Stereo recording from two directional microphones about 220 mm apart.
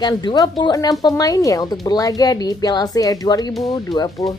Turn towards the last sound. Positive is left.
turn(degrees=20)  # may be behind; listen again after turning